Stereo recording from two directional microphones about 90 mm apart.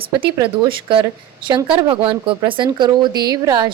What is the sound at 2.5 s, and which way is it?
Speech, 60° right (ahead or behind).